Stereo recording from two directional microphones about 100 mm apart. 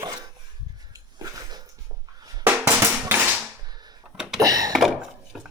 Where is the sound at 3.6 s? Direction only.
45° right (ahead or behind).